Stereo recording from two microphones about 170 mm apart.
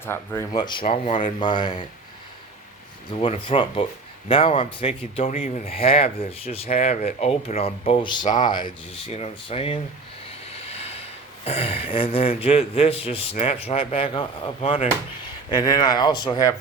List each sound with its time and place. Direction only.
0.0 s speech: 15° left (ahead or behind)
0.5 s a man's voice: 25° left (ahead or behind)
3.2 s a man's voice: 35° left (ahead or behind)
10.5 s a sound: 35° left (ahead or behind)
11.4 s a man's voice: 35° left (ahead or behind)
15.4 s speech: 25° left (ahead or behind)